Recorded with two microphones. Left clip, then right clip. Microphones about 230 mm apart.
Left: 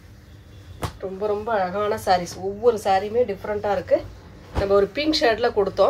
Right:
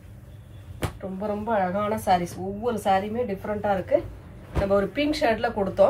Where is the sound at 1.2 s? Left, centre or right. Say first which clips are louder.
Left 2 dB; left.